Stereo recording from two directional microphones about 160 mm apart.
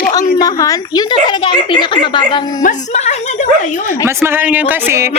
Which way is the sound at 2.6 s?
50° left (ahead or behind).